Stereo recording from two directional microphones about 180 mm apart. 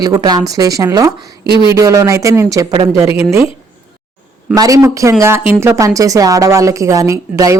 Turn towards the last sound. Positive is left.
turn(degrees=-20)  # may be behind; listen again after turning